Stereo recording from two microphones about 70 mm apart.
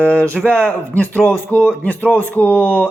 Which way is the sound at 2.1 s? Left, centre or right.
Left.